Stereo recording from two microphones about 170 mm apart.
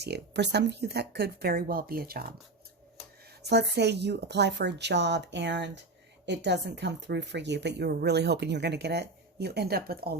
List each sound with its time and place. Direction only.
0.0 s speech: 85° right; by 2.2 s 60° right (ahead or behind)
3.4 s a woman's voice: 80° right